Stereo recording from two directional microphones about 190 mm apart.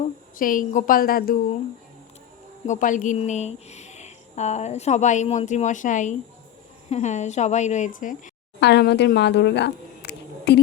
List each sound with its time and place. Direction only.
0.3 s a woman's voice: 45° left (ahead or behind)
2.6 s a woman's voice: 40° left (ahead or behind)
8.6 s speech: 60° left (ahead or behind)